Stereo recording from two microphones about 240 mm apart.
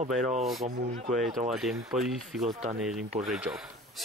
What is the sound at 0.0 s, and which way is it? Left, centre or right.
Speech, right.